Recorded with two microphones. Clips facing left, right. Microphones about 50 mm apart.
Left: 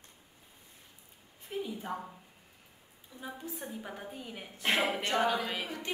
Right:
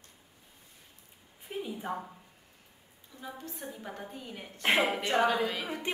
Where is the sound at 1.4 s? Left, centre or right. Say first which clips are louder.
Right 1 dB; centre.